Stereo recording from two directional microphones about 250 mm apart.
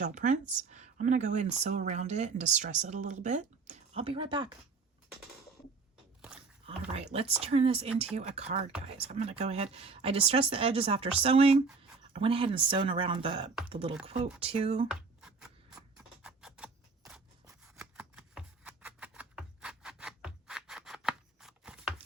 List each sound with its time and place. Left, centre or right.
0.0 s speech: right
6.9 s speech: right
14.8 s writing: centre
16.2 s scissors: centre